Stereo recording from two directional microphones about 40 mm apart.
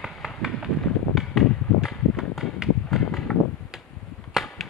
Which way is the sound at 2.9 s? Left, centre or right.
Centre.